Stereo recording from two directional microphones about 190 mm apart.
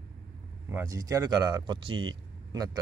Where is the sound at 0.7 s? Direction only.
15° right (ahead or behind).